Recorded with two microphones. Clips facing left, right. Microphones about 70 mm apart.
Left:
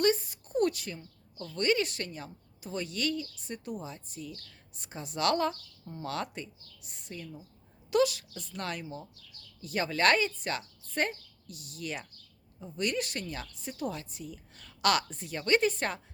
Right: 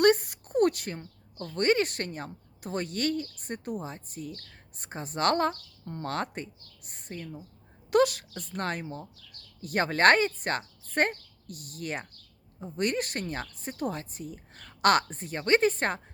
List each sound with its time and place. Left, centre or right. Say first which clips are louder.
0.0 s a woman's voice: right 5 dB; right